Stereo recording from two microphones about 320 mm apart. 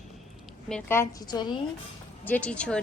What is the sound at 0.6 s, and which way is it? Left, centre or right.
A woman's voice, centre.